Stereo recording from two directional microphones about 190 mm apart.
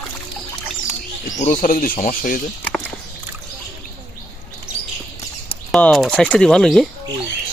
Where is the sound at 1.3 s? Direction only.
45° left (ahead or behind).